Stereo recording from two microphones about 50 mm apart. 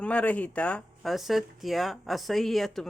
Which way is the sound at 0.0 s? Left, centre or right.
Left.